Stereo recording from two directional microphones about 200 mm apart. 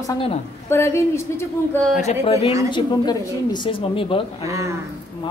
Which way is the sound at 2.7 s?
20° left (ahead or behind).